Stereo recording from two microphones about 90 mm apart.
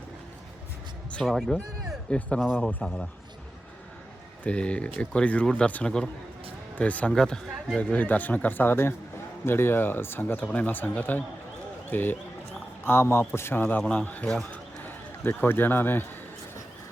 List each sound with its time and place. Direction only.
1.3 s speech: centre (ahead or behind)
2.0 s speech: 10° left (ahead or behind)
4.4 s a man's voice: 10° left (ahead or behind)
14.5 s music: 20° left (ahead or behind)